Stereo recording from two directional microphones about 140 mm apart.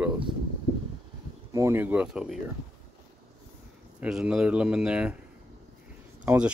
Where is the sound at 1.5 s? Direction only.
20° right (ahead or behind); by 2.4 s 5° right (ahead or behind).